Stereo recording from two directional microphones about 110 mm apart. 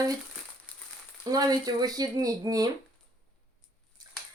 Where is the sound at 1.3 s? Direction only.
35° right (ahead or behind).